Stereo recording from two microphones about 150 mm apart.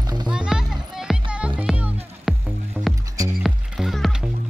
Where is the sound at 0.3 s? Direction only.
5° right (ahead or behind).